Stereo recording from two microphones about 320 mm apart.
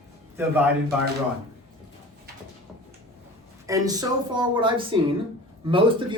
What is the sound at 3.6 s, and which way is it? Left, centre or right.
A man's voice, centre.